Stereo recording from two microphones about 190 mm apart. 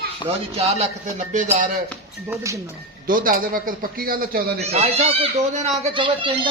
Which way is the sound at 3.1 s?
45° right (ahead or behind).